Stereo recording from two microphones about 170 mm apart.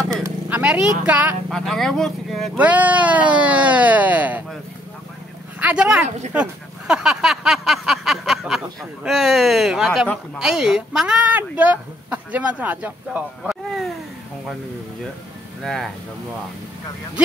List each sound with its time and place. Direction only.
0.1 s vehicle: 15° right (ahead or behind)
1.5 s speech: centre (ahead or behind)
5.6 s speech: 5° right (ahead or behind)
15.6 s speech: centre (ahead or behind)